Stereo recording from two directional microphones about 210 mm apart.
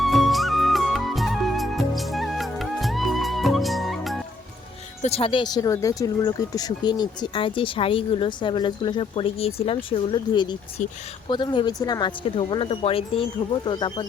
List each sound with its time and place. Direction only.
0.0 s music: centre (ahead or behind)
5.0 s speech: 25° left (ahead or behind)
10.8 s speech: 35° left (ahead or behind)
11.3 s speech: 20° left (ahead or behind)